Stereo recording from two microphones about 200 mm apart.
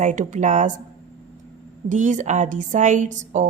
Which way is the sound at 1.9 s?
40° right (ahead or behind).